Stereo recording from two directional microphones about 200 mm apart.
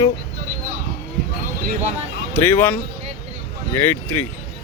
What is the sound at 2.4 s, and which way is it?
Speech, 10° left (ahead or behind).